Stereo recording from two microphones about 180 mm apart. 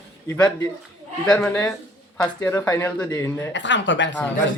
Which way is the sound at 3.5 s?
90° left.